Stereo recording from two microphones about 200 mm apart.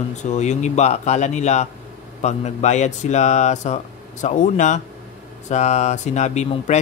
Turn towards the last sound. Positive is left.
turn(degrees=35)  # may be behind; listen again after turning